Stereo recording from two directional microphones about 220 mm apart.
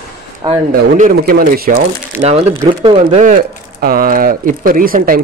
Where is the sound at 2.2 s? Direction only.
30° right (ahead or behind).